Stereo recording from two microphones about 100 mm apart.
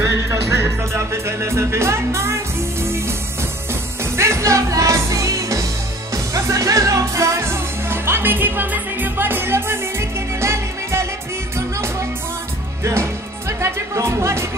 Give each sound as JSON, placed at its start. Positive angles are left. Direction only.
{"t": 0.0, "sound": "music", "side_deg": -25}
{"t": 12.8, "sound": "music", "side_deg": -30}